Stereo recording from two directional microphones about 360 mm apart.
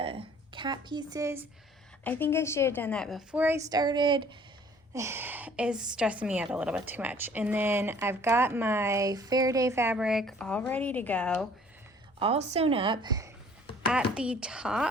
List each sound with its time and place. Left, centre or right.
0.0 s a sound: centre
2.0 s a woman's voice: centre
12.2 s a woman's voice: centre